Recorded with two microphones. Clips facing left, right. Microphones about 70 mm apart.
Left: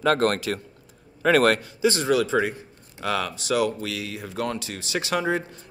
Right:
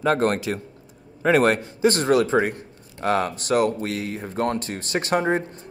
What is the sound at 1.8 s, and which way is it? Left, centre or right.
Speech, right.